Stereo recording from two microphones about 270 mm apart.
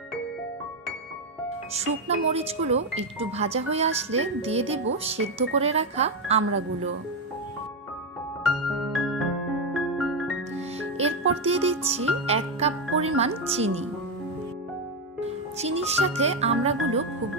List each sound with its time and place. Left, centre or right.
1.7 s speech: right
8.7 s music: centre
10.8 s music: right
13.2 s speech: right
15.5 s speech: right